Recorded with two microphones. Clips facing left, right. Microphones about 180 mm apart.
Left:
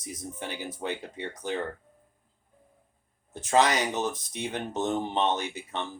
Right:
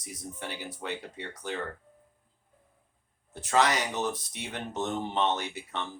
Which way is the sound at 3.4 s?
20° left (ahead or behind).